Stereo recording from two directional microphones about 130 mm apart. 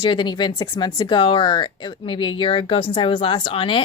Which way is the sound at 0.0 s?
35° left (ahead or behind).